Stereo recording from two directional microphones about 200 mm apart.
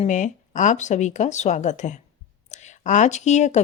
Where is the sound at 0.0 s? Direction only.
40° left (ahead or behind).